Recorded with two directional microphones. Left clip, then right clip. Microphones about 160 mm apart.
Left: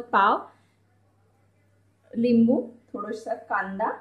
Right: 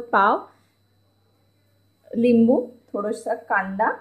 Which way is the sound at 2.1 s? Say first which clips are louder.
Right 4 dB; 40° right (ahead or behind).